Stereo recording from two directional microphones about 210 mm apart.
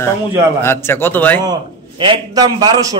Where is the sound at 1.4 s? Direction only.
20° right (ahead or behind).